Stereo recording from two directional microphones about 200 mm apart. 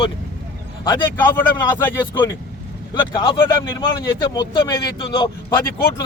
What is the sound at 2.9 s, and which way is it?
Speech, 20° left (ahead or behind).